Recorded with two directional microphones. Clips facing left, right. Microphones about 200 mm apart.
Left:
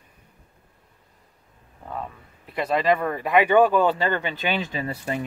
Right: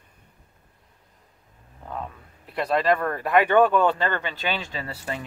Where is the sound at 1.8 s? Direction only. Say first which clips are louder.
Left 1 dB; centre (ahead or behind).